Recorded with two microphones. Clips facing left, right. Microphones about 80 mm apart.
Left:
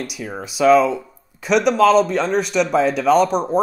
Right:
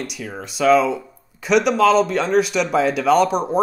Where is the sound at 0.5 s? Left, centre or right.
Centre.